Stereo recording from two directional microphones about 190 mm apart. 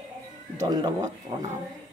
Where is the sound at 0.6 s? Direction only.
20° right (ahead or behind).